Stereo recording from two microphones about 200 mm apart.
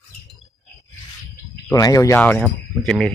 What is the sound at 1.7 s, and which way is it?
Speech, 15° left (ahead or behind).